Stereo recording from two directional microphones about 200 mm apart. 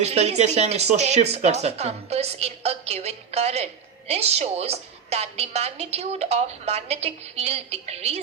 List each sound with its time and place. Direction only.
0.0 s a woman's voice: 30° right (ahead or behind)